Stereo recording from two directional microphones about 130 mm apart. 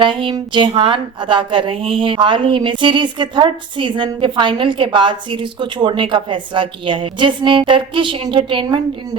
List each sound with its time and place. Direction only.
0.0 s a woman's voice: 40° right (ahead or behind)